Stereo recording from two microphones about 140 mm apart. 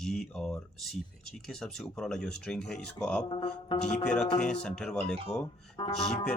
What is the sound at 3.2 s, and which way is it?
Speech, 40° left (ahead or behind).